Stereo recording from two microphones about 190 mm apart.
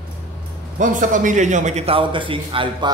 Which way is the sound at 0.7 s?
40° right (ahead or behind).